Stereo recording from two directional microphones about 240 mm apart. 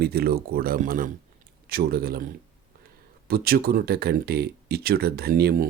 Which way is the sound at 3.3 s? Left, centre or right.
Right.